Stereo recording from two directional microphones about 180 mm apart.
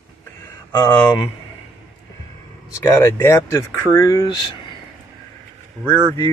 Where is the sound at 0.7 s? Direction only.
20° left (ahead or behind).